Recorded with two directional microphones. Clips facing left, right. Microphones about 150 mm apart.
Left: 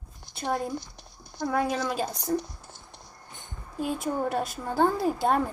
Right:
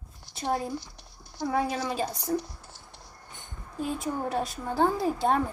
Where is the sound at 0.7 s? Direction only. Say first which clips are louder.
Left 1 dB; 20° left (ahead or behind).